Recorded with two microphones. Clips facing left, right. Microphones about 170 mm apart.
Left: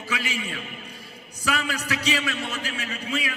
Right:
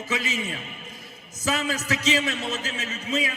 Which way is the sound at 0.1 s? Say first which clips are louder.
Right 1 dB; 20° right (ahead or behind).